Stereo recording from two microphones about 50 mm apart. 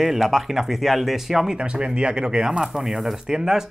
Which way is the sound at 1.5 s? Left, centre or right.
Centre.